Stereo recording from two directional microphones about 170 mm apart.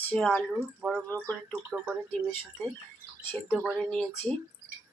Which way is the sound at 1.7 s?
10° right (ahead or behind).